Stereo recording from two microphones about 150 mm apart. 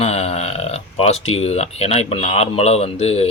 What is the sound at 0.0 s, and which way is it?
A man's voice, 45° left (ahead or behind).